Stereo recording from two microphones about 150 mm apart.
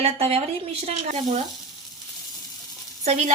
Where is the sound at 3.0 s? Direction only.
50° right (ahead or behind).